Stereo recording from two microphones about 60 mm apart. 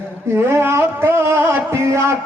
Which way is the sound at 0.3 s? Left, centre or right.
Right.